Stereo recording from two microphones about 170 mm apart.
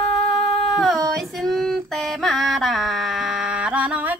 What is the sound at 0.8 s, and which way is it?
Female singing, centre (ahead or behind).